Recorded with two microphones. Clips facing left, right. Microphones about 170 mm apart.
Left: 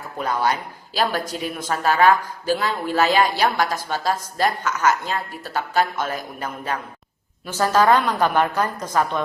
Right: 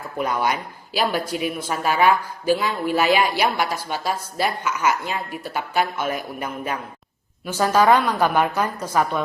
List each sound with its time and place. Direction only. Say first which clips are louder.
0.2 s a woman's voice: even; 15° right (ahead or behind)
7.4 s a woman's voice: even; 10° right (ahead or behind)